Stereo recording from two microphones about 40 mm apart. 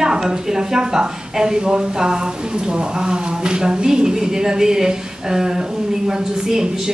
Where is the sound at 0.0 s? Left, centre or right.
Centre.